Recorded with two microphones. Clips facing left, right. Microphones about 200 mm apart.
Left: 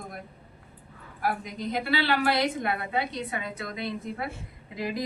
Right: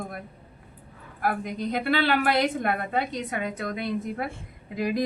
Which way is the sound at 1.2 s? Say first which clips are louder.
Right 3 dB; 50° right (ahead or behind).